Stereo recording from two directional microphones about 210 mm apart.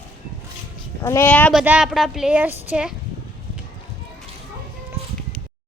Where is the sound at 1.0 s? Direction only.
10° left (ahead or behind).